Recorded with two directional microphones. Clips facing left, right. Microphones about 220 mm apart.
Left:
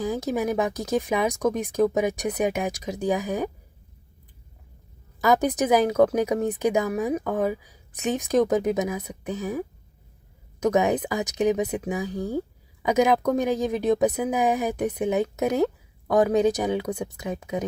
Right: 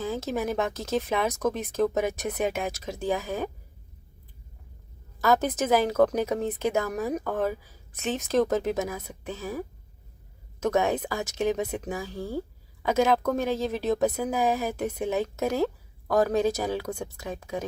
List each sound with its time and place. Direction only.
0.0 s a woman's voice: 15° left (ahead or behind)
5.2 s a woman's voice: 15° left (ahead or behind)